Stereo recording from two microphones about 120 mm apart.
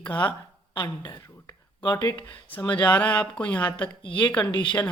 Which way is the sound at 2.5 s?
10° left (ahead or behind).